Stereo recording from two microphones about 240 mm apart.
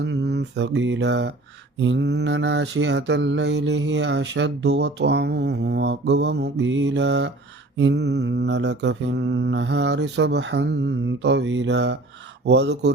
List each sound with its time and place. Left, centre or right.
0.0 s speech: right
1.8 s mantra: right